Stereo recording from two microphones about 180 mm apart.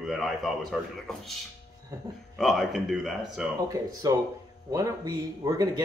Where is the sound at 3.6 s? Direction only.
20° right (ahead or behind).